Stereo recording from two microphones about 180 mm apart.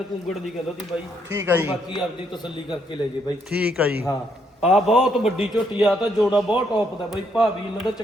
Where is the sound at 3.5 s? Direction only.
5° right (ahead or behind).